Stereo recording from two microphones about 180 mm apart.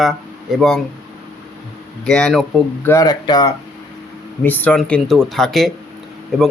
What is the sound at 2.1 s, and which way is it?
Speech, 5° left (ahead or behind).